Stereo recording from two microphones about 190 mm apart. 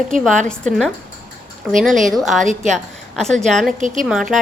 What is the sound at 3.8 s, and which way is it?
Speech, 40° right (ahead or behind).